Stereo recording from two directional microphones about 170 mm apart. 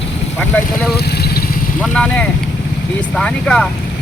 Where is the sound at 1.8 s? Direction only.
5° left (ahead or behind).